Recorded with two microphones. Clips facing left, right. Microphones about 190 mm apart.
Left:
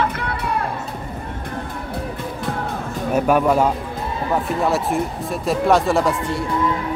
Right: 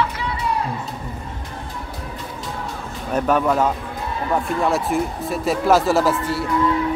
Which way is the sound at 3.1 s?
10° left (ahead or behind).